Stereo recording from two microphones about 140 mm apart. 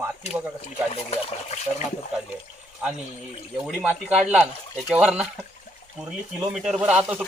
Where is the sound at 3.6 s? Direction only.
5° right (ahead or behind).